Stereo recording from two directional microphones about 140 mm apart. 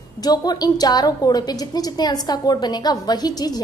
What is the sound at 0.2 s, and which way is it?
A woman's voice, 30° left (ahead or behind).